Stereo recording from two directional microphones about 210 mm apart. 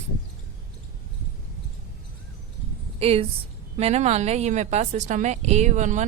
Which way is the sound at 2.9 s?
30° right (ahead or behind).